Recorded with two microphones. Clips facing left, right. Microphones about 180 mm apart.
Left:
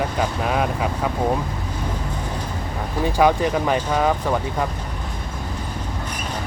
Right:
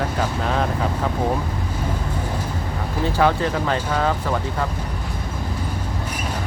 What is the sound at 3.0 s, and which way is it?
Speech, 15° left (ahead or behind).